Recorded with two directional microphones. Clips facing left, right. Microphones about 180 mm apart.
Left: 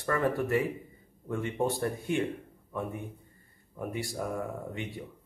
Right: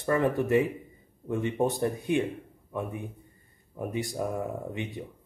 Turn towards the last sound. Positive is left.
turn(degrees=-20)  # may be behind; listen again after turning